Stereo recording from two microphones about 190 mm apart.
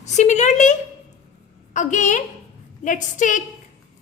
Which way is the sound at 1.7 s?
40° left (ahead or behind).